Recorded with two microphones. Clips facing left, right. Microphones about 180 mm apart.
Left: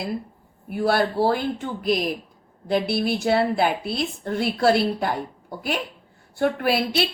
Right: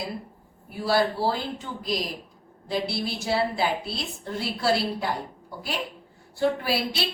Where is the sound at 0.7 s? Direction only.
60° left (ahead or behind).